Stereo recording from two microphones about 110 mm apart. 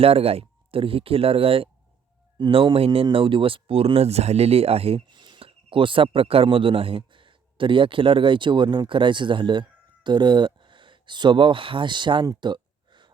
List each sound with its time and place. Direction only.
0.0 s speech: 65° right (ahead or behind)
5.0 s speech: 45° right (ahead or behind)
12.3 s a sound: 45° right (ahead or behind)